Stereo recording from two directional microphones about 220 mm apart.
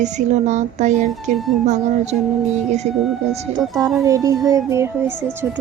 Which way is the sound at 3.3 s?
30° right (ahead or behind).